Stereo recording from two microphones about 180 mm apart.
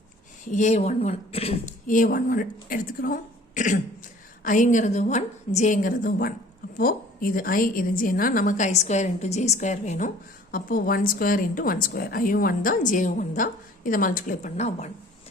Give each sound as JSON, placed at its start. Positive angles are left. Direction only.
{"t": 0.5, "sound": "speech", "side_deg": 40}
{"t": 1.9, "sound": "a woman's voice", "side_deg": 50}